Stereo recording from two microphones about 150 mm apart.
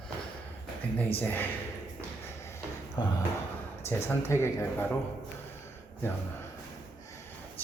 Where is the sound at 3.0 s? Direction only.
30° left (ahead or behind).